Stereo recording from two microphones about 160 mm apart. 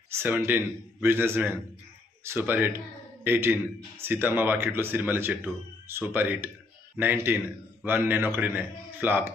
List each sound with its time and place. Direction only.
0.1 s speech: 15° right (ahead or behind)